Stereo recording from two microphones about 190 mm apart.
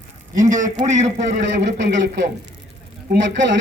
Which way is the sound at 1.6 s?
65° right (ahead or behind).